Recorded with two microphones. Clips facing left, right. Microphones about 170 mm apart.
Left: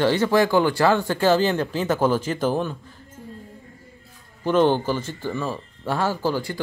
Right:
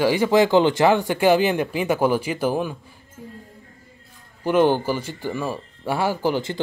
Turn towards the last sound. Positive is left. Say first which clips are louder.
# right 2 dB
turn(degrees=-20)  # may be behind; listen again after turning